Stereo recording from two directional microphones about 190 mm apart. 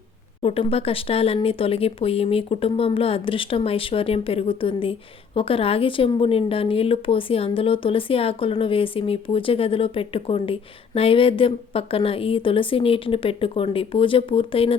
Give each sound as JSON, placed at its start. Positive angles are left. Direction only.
{"t": 0.4, "sound": "speech", "side_deg": 30}